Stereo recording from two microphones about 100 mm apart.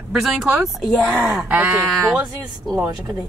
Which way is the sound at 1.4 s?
15° right (ahead or behind).